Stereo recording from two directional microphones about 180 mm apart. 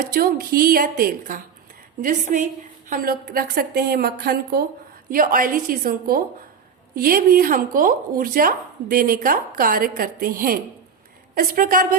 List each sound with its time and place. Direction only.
0.1 s a woman's voice: 60° right (ahead or behind)
5.1 s speech: 50° right (ahead or behind)